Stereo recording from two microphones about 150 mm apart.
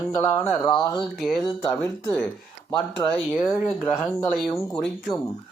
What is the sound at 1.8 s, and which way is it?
Speech, 15° left (ahead or behind).